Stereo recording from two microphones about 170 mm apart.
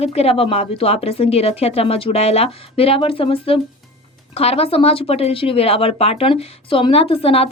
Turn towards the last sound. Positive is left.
turn(degrees=35)  # may be behind; listen again after turning